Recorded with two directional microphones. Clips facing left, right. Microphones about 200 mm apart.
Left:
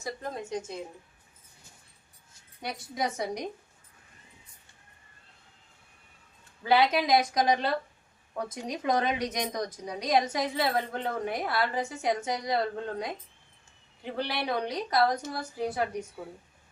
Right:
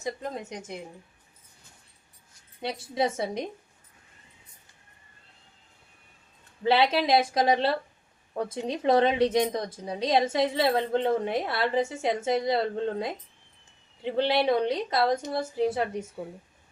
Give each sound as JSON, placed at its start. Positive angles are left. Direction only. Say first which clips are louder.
{"t": 0.0, "sound": "a woman's voice", "louder": "right 3 dB", "side_deg": -20}
{"t": 2.6, "sound": "a woman's voice", "louder": "right 5 dB", "side_deg": -25}
{"t": 6.6, "sound": "a woman's voice", "louder": "right 1 dB", "side_deg": -25}